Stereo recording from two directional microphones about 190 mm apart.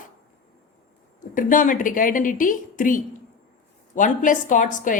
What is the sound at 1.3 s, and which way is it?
A woman's voice, 45° left (ahead or behind).